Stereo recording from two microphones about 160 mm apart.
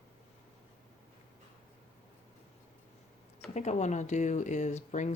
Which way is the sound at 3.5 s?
45° left (ahead or behind).